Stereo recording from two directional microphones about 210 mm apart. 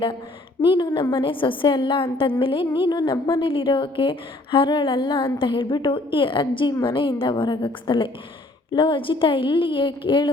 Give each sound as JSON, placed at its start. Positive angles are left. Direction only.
{"t": 0.6, "sound": "a woman's voice", "side_deg": 20}